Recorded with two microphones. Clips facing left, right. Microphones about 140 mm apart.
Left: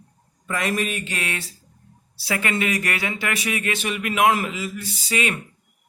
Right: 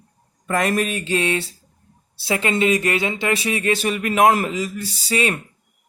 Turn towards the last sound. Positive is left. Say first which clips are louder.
# right 3 dB
turn(degrees=-35)  # may be behind; listen again after turning